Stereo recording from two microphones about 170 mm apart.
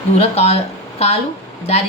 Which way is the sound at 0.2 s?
40° left (ahead or behind).